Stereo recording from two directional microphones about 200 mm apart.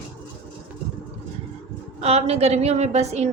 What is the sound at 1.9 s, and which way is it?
A woman's voice, 30° right (ahead or behind).